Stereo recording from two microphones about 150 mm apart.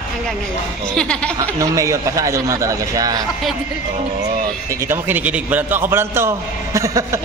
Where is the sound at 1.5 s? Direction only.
20° right (ahead or behind).